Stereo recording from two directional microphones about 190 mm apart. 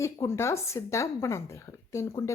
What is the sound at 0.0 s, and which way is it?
Speech, 15° left (ahead or behind).